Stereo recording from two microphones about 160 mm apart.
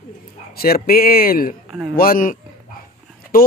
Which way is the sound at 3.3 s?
65° left (ahead or behind).